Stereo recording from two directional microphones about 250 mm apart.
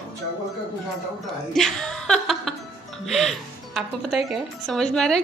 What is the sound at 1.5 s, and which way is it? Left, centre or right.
Speech, centre.